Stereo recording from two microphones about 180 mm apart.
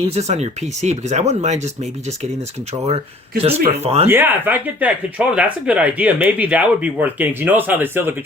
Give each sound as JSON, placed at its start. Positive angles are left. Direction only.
{"t": 0.1, "sound": "speech", "side_deg": -40}
{"t": 3.4, "sound": "speech", "side_deg": -35}
{"t": 4.0, "sound": "speech", "side_deg": -10}